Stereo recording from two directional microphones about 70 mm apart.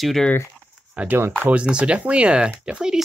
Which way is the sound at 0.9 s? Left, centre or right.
Right.